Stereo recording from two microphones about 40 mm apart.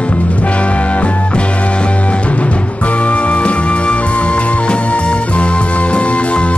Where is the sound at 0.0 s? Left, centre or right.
Left.